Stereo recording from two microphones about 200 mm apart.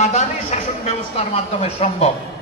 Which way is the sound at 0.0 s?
35° left (ahead or behind).